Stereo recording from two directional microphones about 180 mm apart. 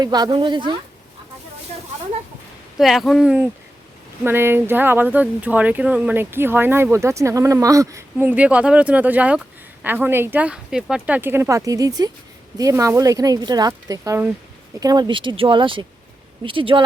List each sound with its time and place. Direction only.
0.0 s speech: 20° right (ahead or behind)
2.7 s speech: centre (ahead or behind); by 16.8 s 30° right (ahead or behind)